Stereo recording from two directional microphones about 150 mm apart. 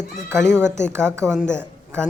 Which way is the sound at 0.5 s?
15° right (ahead or behind).